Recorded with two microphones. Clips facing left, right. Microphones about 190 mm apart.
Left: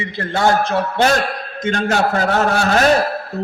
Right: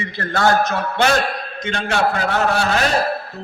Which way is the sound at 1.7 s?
40° left (ahead or behind).